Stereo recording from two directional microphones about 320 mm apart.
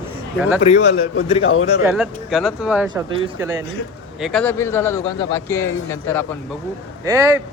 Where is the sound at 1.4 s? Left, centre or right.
Left.